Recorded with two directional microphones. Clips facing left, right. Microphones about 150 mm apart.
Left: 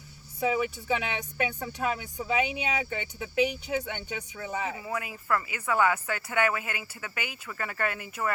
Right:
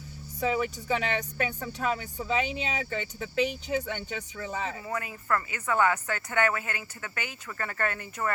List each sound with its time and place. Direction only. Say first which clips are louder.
0.3 s speech: left 1 dB; 10° left (ahead or behind)